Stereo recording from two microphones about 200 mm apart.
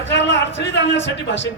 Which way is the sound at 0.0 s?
60° left (ahead or behind).